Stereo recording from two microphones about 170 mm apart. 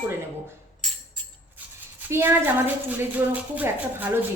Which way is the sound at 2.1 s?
15° right (ahead or behind).